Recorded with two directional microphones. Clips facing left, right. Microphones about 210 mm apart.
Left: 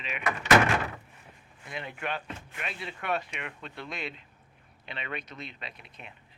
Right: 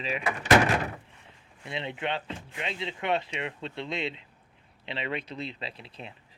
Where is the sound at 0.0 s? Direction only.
30° right (ahead or behind).